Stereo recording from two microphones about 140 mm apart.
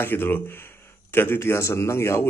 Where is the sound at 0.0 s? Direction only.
15° left (ahead or behind).